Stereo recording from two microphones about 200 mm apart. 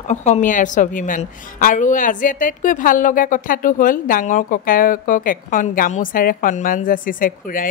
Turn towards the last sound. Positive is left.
turn(degrees=45)  # may be behind; listen again after turning